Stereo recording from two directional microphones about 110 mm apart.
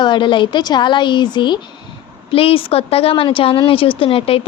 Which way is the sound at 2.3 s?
55° left (ahead or behind).